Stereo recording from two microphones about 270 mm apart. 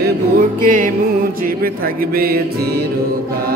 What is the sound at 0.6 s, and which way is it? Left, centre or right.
Music, right.